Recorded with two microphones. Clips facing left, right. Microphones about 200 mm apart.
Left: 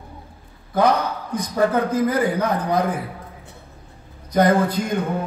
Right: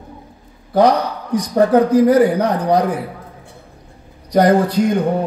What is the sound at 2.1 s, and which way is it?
Music, 35° right (ahead or behind).